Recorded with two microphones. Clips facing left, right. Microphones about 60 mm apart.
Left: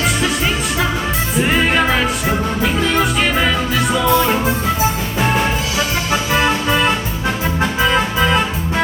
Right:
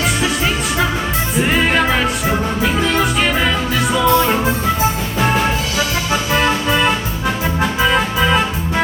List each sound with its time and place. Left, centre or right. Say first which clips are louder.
1.4 s music: even; centre
6.3 s accordion: even; centre
7.6 s music: even; centre